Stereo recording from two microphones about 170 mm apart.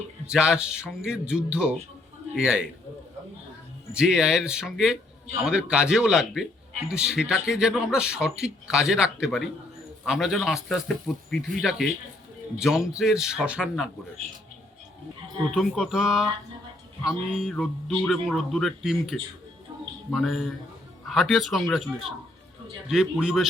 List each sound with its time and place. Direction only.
0.3 s a man's voice: 5° right (ahead or behind)
3.9 s a man's voice: 5° right (ahead or behind)
15.5 s a man's voice: centre (ahead or behind)